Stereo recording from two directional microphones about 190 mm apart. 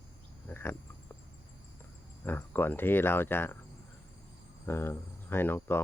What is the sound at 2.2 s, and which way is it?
Speech, 10° left (ahead or behind).